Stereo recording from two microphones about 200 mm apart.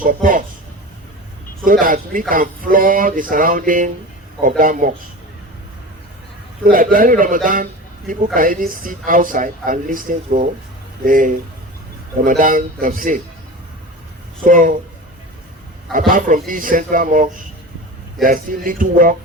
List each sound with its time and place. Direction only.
0.0 s a man's voice: 40° right (ahead or behind)
1.6 s a woman's voice: 45° right (ahead or behind)
6.7 s a woman's voice: 45° right (ahead or behind)
14.4 s a woman's voice: 40° right (ahead or behind)
15.9 s a woman's voice: 45° right (ahead or behind)